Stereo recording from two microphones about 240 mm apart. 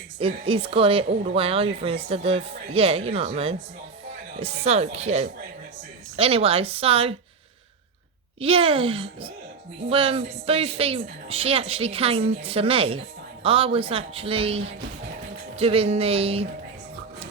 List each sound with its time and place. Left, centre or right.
0.2 s a woman's voice: right
8.4 s a woman's voice: right